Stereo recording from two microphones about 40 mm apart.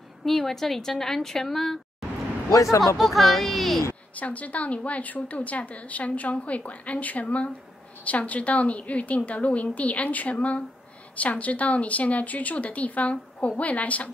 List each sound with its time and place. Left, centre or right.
0.2 s a woman's voice: centre
2.8 s speech: centre
4.1 s a woman's voice: left